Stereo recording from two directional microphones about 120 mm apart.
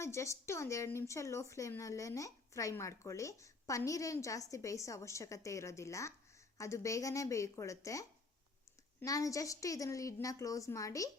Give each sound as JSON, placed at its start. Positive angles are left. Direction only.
{"t": 0.0, "sound": "a woman's voice", "side_deg": 25}
{"t": 9.0, "sound": "a woman's voice", "side_deg": 30}